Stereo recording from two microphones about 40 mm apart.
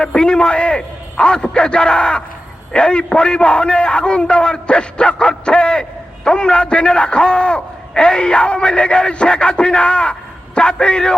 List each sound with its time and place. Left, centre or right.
0.0 s a man's voice: left